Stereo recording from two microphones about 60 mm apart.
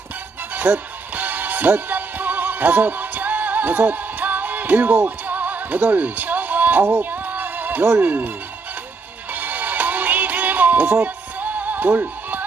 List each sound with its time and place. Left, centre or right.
0.5 s music: right
8.0 s speech: right
9.3 s music: right